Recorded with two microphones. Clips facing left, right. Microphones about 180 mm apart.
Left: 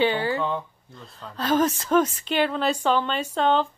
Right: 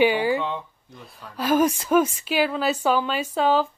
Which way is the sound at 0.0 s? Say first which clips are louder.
Right 3 dB; 10° right (ahead or behind).